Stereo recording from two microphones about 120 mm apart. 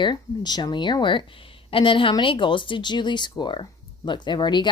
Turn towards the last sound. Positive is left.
turn(degrees=40)  # may be behind; listen again after turning